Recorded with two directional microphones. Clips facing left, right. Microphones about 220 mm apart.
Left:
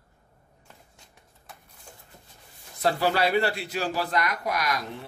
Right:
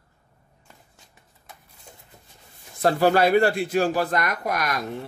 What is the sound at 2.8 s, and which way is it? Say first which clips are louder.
A man's voice: right 5 dB; 50° right (ahead or behind).